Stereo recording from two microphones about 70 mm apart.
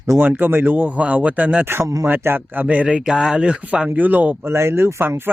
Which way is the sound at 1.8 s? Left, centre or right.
Right.